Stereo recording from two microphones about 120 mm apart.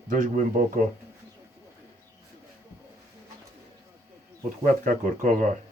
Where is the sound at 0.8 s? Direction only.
90° right.